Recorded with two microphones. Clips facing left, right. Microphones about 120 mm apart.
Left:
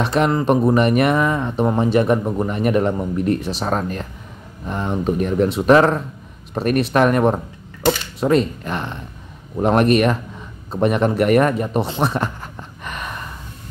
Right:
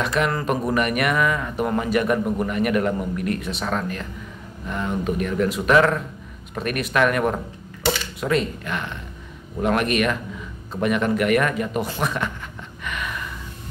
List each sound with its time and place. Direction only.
0.0 s speech: 35° left (ahead or behind)
0.3 s speech: 20° left (ahead or behind)
11.9 s a sound: 30° left (ahead or behind)